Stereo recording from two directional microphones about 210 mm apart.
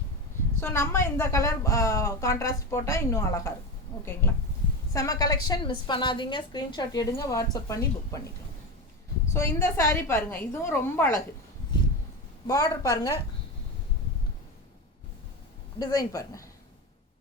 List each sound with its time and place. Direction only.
0.6 s a woman's voice: 10° left (ahead or behind)
9.3 s a woman's voice: 10° left (ahead or behind)
12.5 s a woman's voice: 15° left (ahead or behind)
15.8 s a woman's voice: 15° left (ahead or behind)